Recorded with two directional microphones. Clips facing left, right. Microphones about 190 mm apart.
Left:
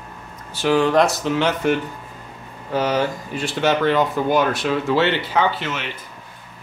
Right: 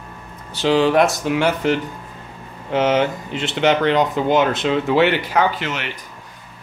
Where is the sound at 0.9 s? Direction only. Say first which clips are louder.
Right 1 dB; centre (ahead or behind).